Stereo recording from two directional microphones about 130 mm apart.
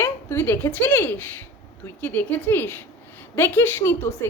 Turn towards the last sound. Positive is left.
turn(degrees=20)  # may be behind; listen again after turning